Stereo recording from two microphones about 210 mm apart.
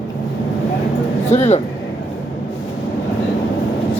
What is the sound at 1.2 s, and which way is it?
Speech, 30° left (ahead or behind).